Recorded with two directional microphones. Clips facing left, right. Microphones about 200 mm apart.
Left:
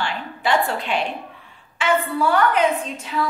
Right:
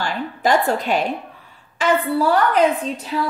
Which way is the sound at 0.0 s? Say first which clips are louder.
Right 4 dB; 40° right (ahead or behind).